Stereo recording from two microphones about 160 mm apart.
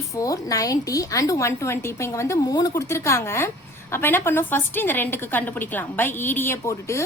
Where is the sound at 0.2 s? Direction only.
20° left (ahead or behind).